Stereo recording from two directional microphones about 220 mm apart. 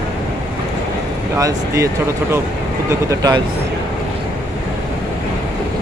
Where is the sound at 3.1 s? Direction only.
20° right (ahead or behind).